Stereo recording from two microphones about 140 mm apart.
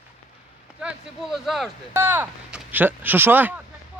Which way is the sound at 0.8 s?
5° right (ahead or behind).